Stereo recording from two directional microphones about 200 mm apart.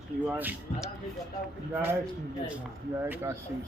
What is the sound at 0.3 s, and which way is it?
A man's voice, 5° right (ahead or behind).